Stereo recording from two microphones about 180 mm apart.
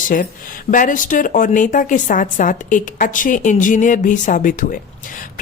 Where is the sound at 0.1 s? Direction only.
50° left (ahead or behind).